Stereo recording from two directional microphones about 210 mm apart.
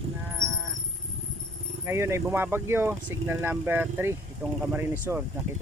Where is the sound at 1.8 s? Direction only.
10° right (ahead or behind).